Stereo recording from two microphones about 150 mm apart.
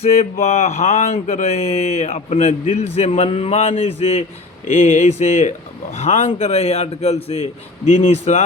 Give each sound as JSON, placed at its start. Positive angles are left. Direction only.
{"t": 0.0, "sound": "mantra", "side_deg": 45}
{"t": 4.6, "sound": "speech", "side_deg": 55}
{"t": 6.0, "sound": "mantra", "side_deg": 50}